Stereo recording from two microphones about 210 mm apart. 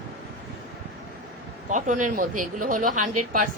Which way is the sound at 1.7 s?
35° right (ahead or behind).